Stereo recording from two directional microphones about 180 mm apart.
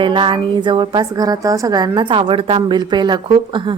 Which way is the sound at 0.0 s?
25° right (ahead or behind).